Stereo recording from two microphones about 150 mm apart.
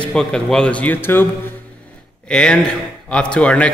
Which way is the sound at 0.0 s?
5° left (ahead or behind).